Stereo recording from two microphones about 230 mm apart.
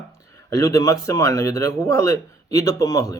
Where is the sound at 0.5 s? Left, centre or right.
Centre.